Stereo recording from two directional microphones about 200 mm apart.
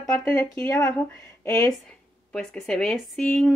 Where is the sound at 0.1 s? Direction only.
5° left (ahead or behind).